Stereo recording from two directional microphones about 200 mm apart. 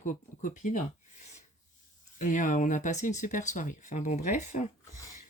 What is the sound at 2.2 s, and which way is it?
Speech, 40° left (ahead or behind).